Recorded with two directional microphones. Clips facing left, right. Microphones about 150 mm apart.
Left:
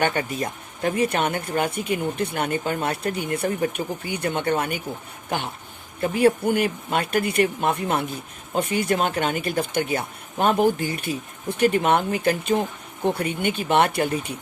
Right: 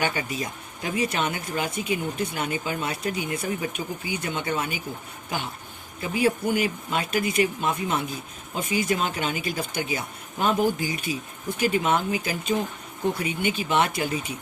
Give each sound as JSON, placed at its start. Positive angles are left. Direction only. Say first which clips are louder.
{"t": 0.0, "sound": "speech", "louder": "left 4 dB", "side_deg": 55}
{"t": 6.0, "sound": "speech", "louder": "left 5 dB", "side_deg": 55}